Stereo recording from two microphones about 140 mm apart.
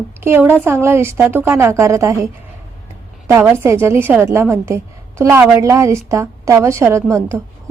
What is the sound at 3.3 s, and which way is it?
A woman's voice, 15° right (ahead or behind).